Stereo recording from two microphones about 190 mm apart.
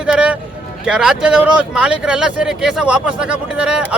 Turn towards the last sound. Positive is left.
turn(degrees=-5)  # may be behind; listen again after turning